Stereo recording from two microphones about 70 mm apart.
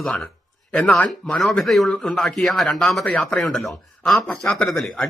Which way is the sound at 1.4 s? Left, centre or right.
Centre.